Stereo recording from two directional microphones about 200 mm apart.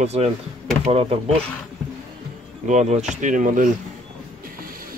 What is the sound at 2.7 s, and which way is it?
Speech, 35° right (ahead or behind).